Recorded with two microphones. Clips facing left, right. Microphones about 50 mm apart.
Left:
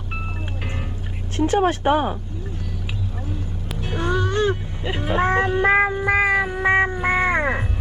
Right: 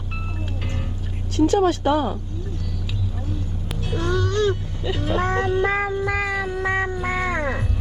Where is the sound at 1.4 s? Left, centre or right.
Left.